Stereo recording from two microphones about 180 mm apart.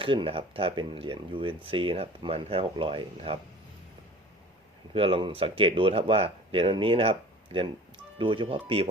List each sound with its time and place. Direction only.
0.0 s speech: 30° right (ahead or behind)
4.9 s speech: 30° right (ahead or behind)